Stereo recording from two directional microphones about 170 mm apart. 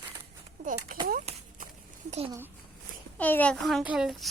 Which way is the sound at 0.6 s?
50° right (ahead or behind).